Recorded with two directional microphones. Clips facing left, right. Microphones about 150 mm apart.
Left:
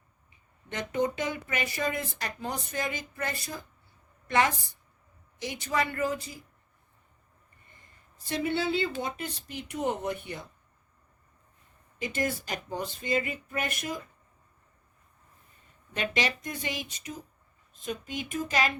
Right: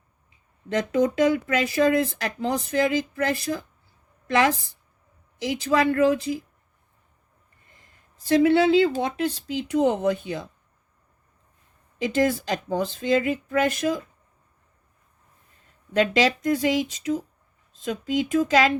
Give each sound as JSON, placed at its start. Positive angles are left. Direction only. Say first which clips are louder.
{"t": 0.7, "sound": "speech", "louder": "right 7 dB", "side_deg": -90}
{"t": 7.8, "sound": "speech", "louder": "right 1 dB", "side_deg": -90}
{"t": 11.9, "sound": "speech", "louder": "right 9 dB", "side_deg": -90}
{"t": 16.0, "sound": "speech", "louder": "right 10 dB", "side_deg": -90}